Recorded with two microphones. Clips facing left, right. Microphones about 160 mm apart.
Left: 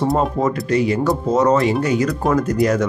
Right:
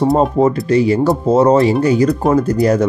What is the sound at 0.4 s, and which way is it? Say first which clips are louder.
Speech: right 5 dB; 30° right (ahead or behind).